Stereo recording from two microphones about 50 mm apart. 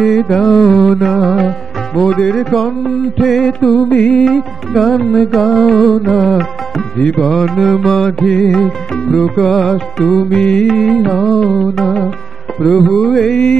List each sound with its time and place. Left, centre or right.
0.0 s music: centre
3.9 s music: centre
4.2 s music: centre
10.7 s music: centre